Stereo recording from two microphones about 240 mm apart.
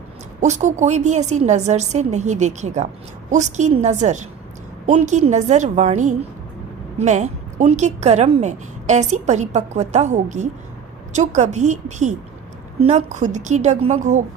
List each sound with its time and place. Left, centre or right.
0.3 s a woman's voice: right